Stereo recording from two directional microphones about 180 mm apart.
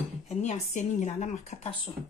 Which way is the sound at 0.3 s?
40° left (ahead or behind).